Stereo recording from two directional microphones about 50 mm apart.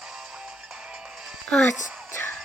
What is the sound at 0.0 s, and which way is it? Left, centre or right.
Music, centre.